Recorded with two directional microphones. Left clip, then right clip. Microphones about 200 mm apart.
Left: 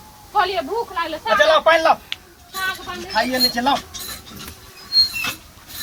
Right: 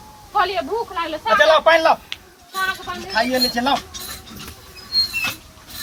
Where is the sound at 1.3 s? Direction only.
Centre (ahead or behind).